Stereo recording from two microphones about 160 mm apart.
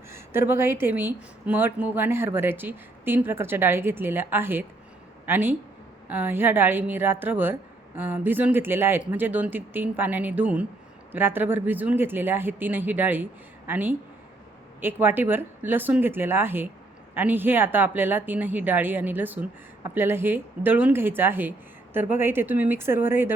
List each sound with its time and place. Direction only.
0.1 s speech: 15° right (ahead or behind)